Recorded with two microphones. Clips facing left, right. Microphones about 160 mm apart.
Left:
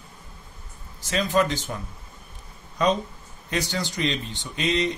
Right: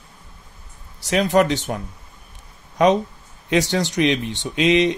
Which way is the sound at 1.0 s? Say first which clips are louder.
Right 6 dB; 75° right (ahead or behind).